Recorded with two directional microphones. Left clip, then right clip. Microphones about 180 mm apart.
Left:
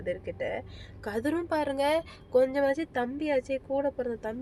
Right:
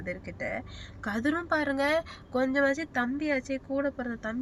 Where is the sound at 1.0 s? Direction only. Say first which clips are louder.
Right 1 dB; 15° left (ahead or behind).